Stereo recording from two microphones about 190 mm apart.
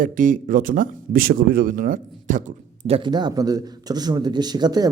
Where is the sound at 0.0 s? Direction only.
45° right (ahead or behind).